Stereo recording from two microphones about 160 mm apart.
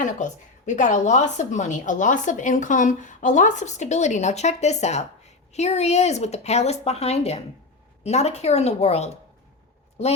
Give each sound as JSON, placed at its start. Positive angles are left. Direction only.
{"t": 0.0, "sound": "a woman's voice", "side_deg": 50}